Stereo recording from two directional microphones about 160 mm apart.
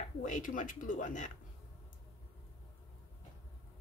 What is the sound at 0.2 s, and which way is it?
Speech, 55° left (ahead or behind).